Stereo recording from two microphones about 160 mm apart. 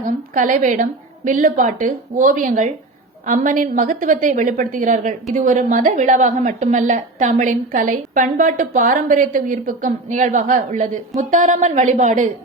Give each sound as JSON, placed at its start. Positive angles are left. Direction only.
{"t": 0.3, "sound": "a woman's voice", "side_deg": -55}